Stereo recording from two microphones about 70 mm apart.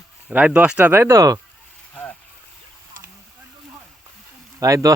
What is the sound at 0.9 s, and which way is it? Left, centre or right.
Speech, right.